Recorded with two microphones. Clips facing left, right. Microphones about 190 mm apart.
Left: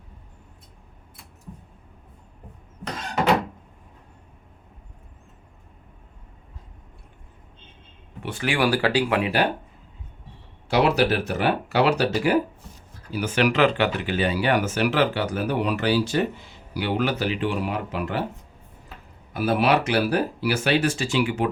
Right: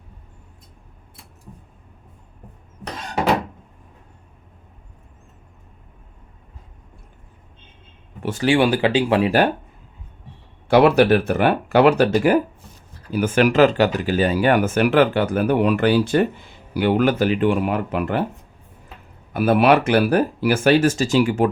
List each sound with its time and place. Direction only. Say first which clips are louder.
8.2 s speech: right 7 dB; 45° right (ahead or behind)
8.4 s speech: right 5 dB; 25° right (ahead or behind)
10.7 s speech: right 7 dB; 55° right (ahead or behind)
19.3 s speech: right 5 dB; 55° right (ahead or behind)